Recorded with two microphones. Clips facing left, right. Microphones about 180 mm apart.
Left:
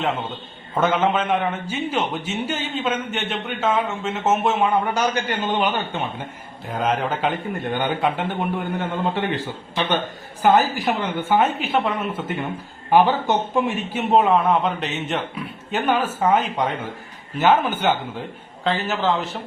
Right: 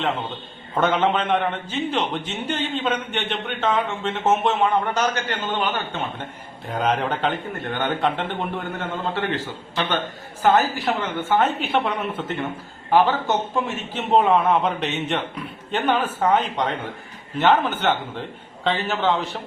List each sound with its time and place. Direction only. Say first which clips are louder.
0.7 s a man's voice: even; centre (ahead or behind)
6.7 s a man's voice: even; 5° left (ahead or behind)
12.9 s a man's voice: left 2 dB; 15° left (ahead or behind)
14.1 s a man's voice: even; centre (ahead or behind)